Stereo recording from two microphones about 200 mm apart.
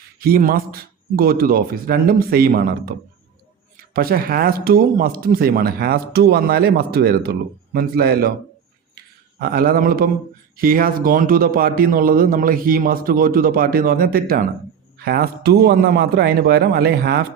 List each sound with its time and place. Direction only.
0.2 s speech: 45° right (ahead or behind)
3.9 s speech: 45° right (ahead or behind)
9.4 s speech: 45° right (ahead or behind)